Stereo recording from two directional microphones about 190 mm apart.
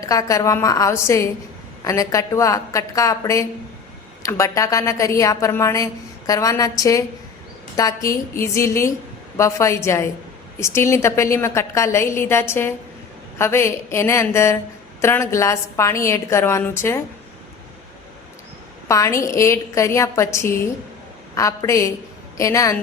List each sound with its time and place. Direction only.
0.0 s a woman's voice: 15° left (ahead or behind)
18.9 s a woman's voice: 15° left (ahead or behind)